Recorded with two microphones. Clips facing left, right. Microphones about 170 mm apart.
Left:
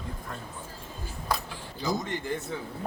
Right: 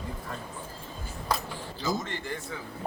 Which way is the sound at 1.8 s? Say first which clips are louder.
Left 1 dB; 20° left (ahead or behind).